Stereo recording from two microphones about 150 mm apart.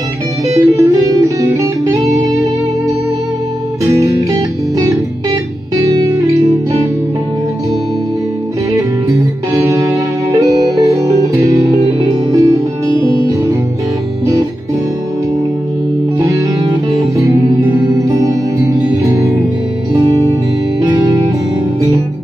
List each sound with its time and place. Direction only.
0.6 s music: 20° right (ahead or behind)
4.0 s music: 20° right (ahead or behind)
8.7 s music: 20° right (ahead or behind)
16.9 s music: 20° right (ahead or behind)